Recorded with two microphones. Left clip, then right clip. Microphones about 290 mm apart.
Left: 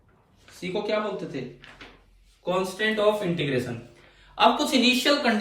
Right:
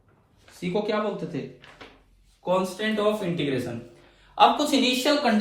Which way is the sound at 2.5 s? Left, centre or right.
Centre.